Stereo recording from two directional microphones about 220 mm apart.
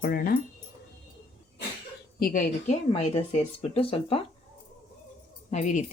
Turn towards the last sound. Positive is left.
turn(degrees=35)  # may be behind; listen again after turning